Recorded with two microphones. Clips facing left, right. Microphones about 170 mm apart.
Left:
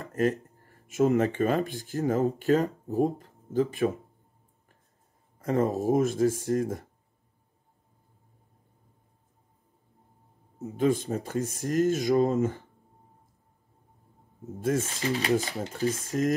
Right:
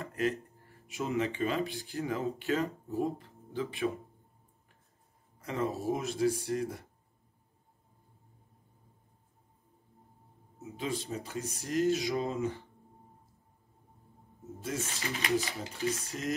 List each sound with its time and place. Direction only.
0.0 s speech: 40° left (ahead or behind)
5.4 s speech: 45° left (ahead or behind)
10.6 s speech: 50° left (ahead or behind)
14.4 s speech: 50° left (ahead or behind)